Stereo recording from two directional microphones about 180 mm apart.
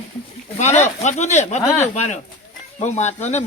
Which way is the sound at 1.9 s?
40° left (ahead or behind).